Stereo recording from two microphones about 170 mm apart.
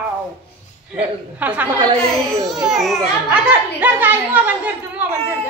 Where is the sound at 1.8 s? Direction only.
30° right (ahead or behind).